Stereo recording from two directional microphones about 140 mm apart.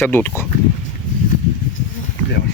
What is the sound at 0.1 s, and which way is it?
Speech, 15° left (ahead or behind).